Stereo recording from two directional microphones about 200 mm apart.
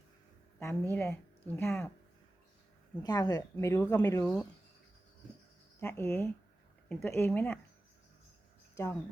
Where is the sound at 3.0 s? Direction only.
20° left (ahead or behind).